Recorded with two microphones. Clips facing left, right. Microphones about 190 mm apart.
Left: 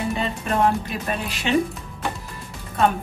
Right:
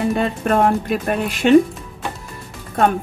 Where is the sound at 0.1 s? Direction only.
60° right (ahead or behind).